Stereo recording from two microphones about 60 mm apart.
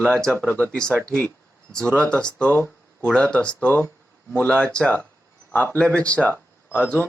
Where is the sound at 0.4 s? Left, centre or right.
Left.